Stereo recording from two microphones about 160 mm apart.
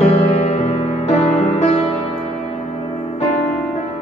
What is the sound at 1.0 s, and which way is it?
Music, 40° left (ahead or behind).